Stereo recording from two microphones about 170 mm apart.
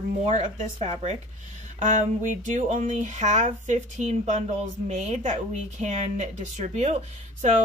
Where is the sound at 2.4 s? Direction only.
45° right (ahead or behind).